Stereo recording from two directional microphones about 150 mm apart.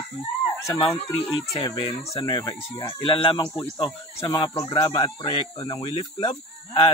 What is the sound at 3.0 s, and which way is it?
Speech, 35° left (ahead or behind).